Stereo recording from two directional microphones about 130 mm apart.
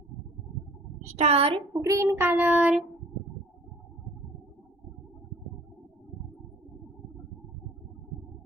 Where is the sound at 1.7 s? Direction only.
25° right (ahead or behind); by 2.8 s 10° right (ahead or behind).